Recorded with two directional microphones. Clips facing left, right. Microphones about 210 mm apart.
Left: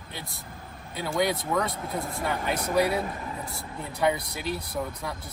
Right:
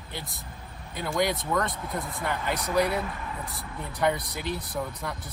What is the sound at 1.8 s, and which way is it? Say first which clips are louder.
Speech: left 1 dB; 30° left (ahead or behind).